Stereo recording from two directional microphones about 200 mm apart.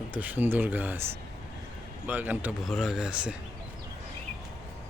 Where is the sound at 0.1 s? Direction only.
10° right (ahead or behind).